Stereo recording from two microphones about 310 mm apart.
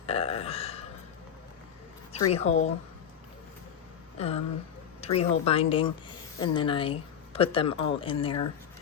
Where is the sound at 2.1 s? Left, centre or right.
Centre.